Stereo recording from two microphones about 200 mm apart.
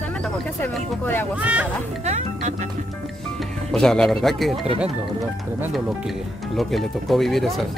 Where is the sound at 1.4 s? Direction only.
5° right (ahead or behind).